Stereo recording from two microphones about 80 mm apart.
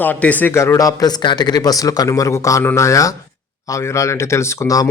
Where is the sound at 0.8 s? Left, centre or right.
Left.